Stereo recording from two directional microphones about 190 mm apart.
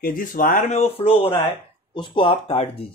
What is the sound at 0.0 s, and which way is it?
A man's voice, 45° left (ahead or behind).